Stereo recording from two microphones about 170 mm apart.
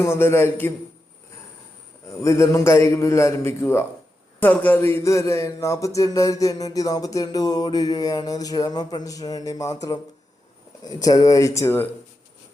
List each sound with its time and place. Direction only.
0.0 s a man's voice: 15° left (ahead or behind)
2.2 s a man's voice: 15° left (ahead or behind)